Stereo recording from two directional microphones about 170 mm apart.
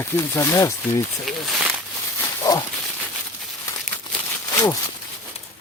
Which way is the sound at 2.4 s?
20° left (ahead or behind).